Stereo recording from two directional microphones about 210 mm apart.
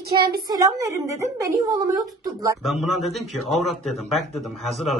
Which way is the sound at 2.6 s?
Centre (ahead or behind).